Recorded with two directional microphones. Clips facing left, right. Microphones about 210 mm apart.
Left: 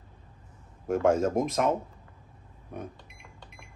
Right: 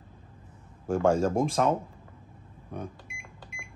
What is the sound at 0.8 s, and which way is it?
Speech, 30° right (ahead or behind).